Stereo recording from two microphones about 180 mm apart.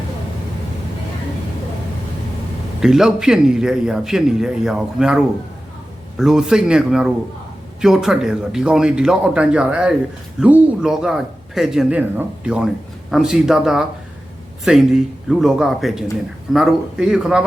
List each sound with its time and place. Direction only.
2.8 s a man's voice: 5° right (ahead or behind)